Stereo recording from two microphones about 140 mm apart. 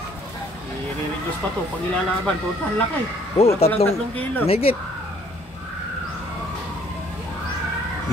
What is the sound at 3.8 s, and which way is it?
Speech, 15° left (ahead or behind).